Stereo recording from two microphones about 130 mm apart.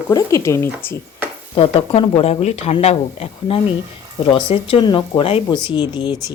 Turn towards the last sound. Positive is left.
turn(degrees=35)  # may be behind; listen again after turning